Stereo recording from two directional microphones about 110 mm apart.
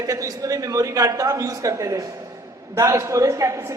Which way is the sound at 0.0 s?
30° right (ahead or behind).